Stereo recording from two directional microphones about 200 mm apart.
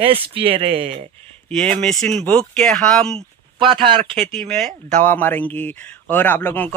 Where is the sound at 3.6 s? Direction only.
25° right (ahead or behind).